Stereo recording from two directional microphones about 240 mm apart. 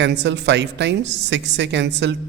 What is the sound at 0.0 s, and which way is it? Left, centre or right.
A woman's voice, right.